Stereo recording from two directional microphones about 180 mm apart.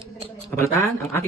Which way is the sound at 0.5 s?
15° left (ahead or behind).